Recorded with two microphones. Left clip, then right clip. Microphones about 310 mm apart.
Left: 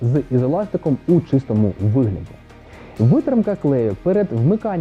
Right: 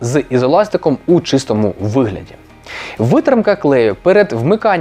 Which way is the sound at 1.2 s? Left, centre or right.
Centre.